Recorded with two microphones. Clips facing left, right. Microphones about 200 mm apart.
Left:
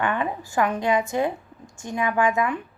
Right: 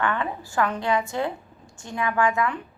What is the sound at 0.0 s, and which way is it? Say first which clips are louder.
A woman's voice: left 1 dB; 15° left (ahead or behind).